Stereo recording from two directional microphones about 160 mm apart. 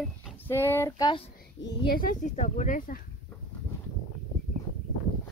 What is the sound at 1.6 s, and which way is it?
Speech, 70° left (ahead or behind).